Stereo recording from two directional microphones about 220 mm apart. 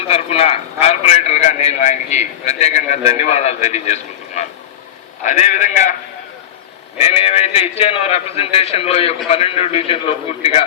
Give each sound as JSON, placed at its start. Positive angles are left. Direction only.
{"t": 0.1, "sound": "a man's voice", "side_deg": 25}
{"t": 7.0, "sound": "a man's voice", "side_deg": 30}